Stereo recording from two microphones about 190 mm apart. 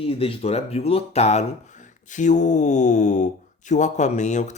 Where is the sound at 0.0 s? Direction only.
30° left (ahead or behind).